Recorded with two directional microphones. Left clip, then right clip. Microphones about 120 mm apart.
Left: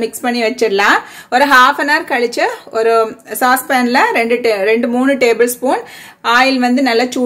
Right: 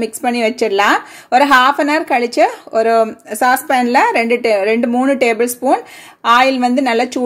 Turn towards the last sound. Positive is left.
turn(degrees=-45)  # may be behind; listen again after turning